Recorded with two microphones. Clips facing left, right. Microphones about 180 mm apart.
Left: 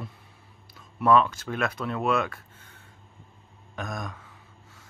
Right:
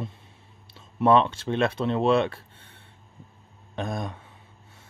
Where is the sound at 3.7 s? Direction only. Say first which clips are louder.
Right 4 dB; 30° right (ahead or behind).